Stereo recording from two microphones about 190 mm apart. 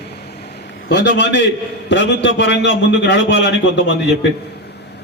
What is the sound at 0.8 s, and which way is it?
A man's voice, 65° left (ahead or behind).